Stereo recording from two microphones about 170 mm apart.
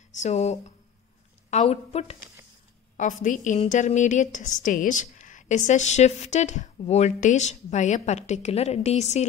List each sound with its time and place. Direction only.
0.1 s a woman's voice: 45° left (ahead or behind)
3.0 s a woman's voice: 50° left (ahead or behind)